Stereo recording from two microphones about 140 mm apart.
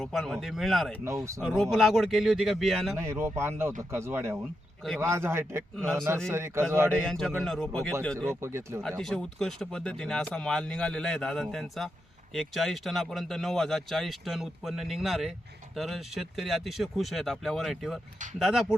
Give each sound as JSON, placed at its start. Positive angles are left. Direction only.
{"t": 0.0, "sound": "speech", "side_deg": 0}
{"t": 1.0, "sound": "speech", "side_deg": -20}
{"t": 1.4, "sound": "speech", "side_deg": 0}
{"t": 2.9, "sound": "speech", "side_deg": -20}
{"t": 5.7, "sound": "speech", "side_deg": 5}
{"t": 6.2, "sound": "speech", "side_deg": -20}
{"t": 6.9, "sound": "speech", "side_deg": 5}
{"t": 8.3, "sound": "speech", "side_deg": -20}
{"t": 8.8, "sound": "speech", "side_deg": 0}